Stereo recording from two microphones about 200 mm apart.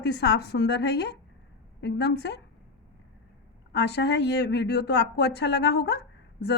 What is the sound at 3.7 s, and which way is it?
Speech, 55° left (ahead or behind).